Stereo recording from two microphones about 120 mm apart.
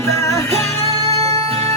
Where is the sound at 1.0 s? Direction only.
55° right (ahead or behind).